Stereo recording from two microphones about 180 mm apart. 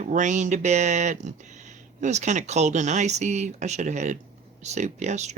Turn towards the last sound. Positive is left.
turn(degrees=-40)  # may be behind; listen again after turning